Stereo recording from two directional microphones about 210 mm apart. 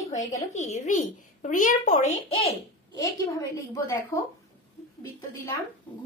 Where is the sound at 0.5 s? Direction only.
35° left (ahead or behind).